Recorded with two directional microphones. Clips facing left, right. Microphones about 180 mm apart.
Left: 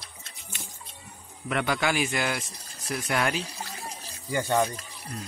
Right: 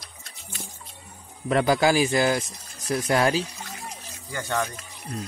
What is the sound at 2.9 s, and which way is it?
Speech, 35° right (ahead or behind).